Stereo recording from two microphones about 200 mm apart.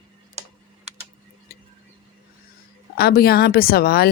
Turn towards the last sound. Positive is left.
turn(degrees=50)  # may be behind; listen again after turning